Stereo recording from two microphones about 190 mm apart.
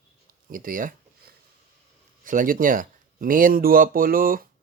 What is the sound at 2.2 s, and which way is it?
Speech, 45° right (ahead or behind).